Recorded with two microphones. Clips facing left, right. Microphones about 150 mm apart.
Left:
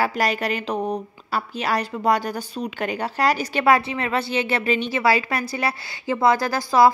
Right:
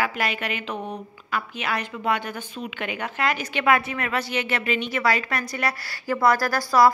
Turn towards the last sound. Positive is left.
turn(degrees=25)  # may be behind; listen again after turning